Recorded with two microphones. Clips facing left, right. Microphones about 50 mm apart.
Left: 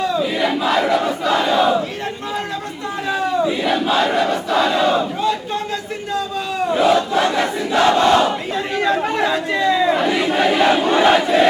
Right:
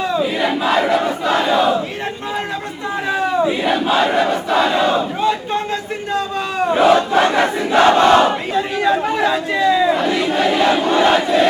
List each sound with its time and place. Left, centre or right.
0.0 s crowd: centre
3.1 s crowd: right
5.2 s crowd: right
6.1 s battle cry: right
8.5 s chatter: centre
9.0 s battle cry: centre